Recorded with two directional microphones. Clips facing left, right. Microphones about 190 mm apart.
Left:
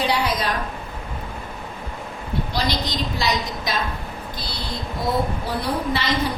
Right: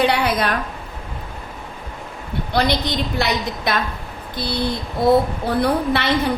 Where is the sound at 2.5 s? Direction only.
60° right (ahead or behind).